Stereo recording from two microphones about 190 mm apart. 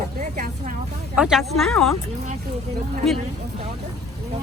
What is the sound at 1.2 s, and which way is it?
Speech, centre (ahead or behind).